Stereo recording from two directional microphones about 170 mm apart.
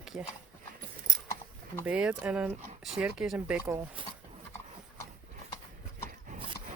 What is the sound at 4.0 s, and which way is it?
Speech, 30° right (ahead or behind).